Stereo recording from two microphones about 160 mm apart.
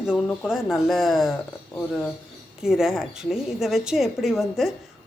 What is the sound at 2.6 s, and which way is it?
Speech, 5° right (ahead or behind).